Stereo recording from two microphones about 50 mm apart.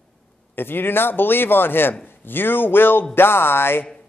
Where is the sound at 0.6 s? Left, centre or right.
Left.